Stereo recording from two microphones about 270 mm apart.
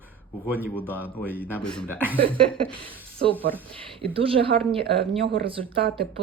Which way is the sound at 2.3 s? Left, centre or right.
Centre.